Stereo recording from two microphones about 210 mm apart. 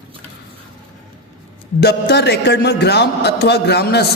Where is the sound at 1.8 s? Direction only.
50° left (ahead or behind).